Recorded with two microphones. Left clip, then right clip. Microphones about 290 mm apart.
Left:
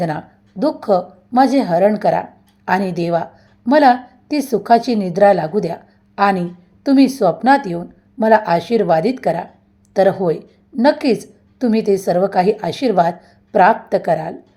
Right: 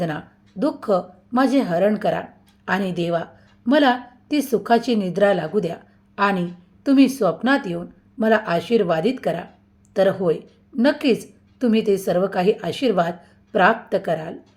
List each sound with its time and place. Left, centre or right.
0.6 s a woman's voice: centre